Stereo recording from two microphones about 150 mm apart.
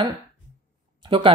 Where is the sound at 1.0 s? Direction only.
35° right (ahead or behind).